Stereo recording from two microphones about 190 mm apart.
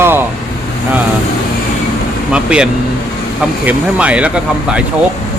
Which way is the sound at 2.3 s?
5° right (ahead or behind).